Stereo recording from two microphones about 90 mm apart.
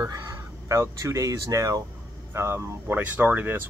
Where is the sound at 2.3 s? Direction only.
30° right (ahead or behind).